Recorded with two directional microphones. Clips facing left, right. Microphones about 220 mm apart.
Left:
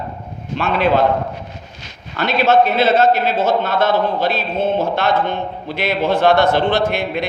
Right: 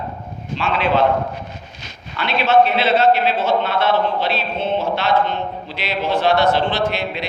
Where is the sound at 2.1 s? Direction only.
40° left (ahead or behind).